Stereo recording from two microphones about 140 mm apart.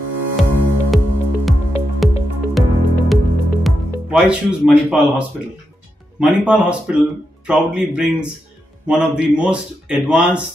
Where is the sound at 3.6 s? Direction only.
5° right (ahead or behind).